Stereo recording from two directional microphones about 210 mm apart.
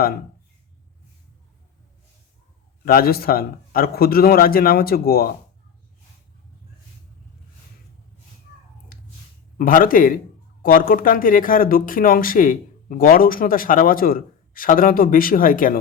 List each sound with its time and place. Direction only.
2.8 s a man's voice: 45° left (ahead or behind)
9.6 s speech: 40° left (ahead or behind)